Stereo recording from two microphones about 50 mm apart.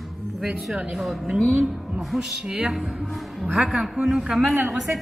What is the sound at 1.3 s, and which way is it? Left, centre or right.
Music, right.